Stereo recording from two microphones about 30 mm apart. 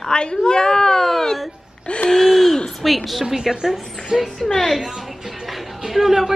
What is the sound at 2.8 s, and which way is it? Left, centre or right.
Speech, centre.